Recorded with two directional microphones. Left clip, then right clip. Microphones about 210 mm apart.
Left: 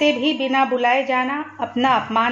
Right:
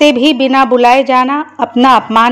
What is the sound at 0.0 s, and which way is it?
A woman's voice, 40° right (ahead or behind).